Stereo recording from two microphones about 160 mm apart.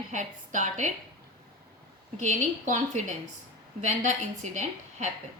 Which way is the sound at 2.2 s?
50° right (ahead or behind).